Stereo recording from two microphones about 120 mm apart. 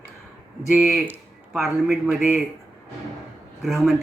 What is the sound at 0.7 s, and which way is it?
Speech, 5° right (ahead or behind).